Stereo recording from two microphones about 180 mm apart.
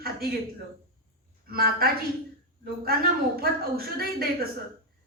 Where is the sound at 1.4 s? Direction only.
55° right (ahead or behind).